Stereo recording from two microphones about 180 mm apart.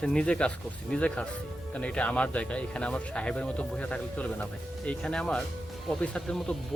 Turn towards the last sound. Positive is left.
turn(degrees=5)  # may be behind; listen again after turning